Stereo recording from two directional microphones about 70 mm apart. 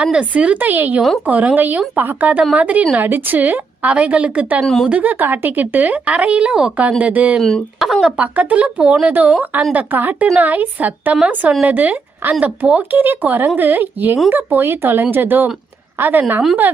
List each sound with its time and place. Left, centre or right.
0.0 s speech: centre
4.6 s speech: centre
4.9 s speech: right
7.4 s speech: centre
8.0 s a woman's voice: centre